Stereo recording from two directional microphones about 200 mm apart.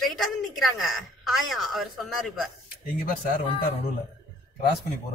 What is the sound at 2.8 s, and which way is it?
Speech, 45° left (ahead or behind).